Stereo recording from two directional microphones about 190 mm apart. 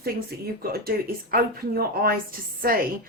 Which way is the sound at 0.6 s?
50° right (ahead or behind).